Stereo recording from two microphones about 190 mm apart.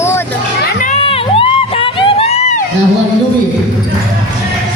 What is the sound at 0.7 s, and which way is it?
Crowd, 40° left (ahead or behind).